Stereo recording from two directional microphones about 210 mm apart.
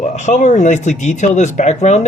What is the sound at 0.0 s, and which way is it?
Speech, 35° left (ahead or behind).